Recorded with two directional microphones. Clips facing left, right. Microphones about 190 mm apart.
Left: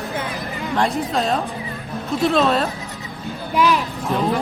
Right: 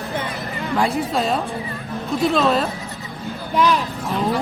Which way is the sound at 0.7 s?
5° right (ahead or behind).